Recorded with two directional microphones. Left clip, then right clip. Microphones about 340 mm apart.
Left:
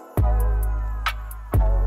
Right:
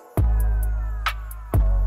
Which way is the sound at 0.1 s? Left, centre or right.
Centre.